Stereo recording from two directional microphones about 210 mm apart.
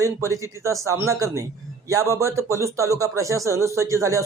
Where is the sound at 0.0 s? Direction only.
15° right (ahead or behind).